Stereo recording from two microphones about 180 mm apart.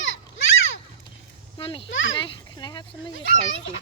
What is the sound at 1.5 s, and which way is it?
Speech, 30° left (ahead or behind).